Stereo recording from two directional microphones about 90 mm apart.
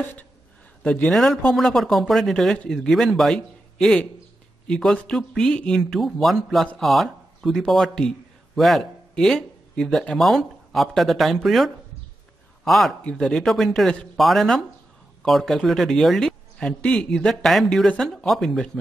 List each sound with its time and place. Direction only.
0.0 s a woman's voice: 20° left (ahead or behind)
1.1 s a man's voice: centre (ahead or behind)